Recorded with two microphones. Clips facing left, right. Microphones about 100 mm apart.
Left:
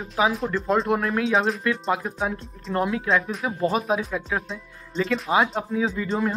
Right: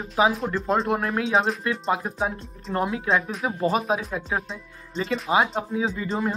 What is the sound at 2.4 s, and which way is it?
Speech, centre (ahead or behind).